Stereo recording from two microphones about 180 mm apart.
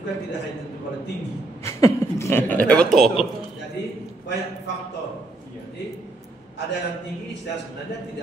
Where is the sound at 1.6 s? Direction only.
15° left (ahead or behind).